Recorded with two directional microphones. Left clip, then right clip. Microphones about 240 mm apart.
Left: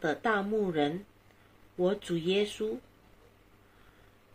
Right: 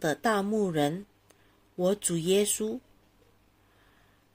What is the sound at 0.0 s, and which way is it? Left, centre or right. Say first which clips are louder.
Speech: right 2 dB; right.